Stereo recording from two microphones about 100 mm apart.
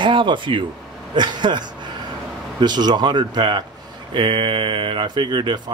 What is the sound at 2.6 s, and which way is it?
Speech, 45° right (ahead or behind).